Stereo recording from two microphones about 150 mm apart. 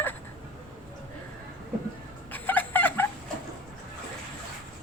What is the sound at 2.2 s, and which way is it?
Chicken, 10° left (ahead or behind).